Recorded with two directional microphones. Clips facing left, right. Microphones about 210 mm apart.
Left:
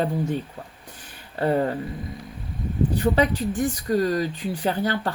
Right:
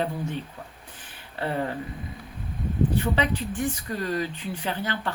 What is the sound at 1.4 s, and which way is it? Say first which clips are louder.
Speech: left 6 dB; 40° left (ahead or behind).